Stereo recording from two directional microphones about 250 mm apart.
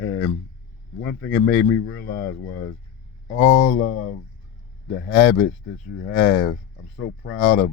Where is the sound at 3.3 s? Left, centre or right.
Left.